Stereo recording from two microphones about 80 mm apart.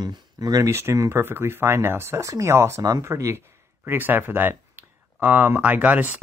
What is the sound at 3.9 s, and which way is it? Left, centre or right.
Speech, right.